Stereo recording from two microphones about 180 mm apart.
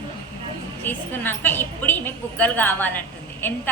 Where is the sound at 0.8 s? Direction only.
10° left (ahead or behind).